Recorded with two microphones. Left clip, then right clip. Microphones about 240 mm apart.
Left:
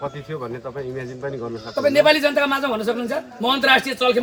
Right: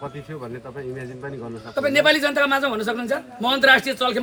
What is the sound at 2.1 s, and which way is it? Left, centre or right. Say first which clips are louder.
Speech: left 1 dB; right.